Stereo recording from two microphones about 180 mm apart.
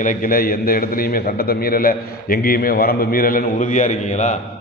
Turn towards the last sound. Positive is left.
turn(degrees=45)  # may be behind; listen again after turning